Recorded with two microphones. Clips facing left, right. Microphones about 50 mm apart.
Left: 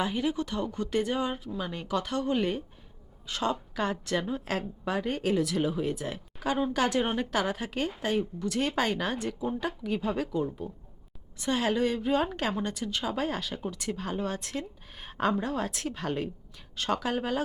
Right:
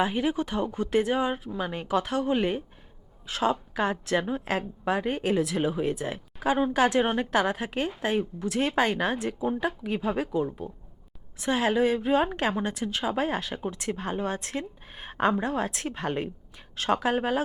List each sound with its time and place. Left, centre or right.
0.0 s a woman's voice: right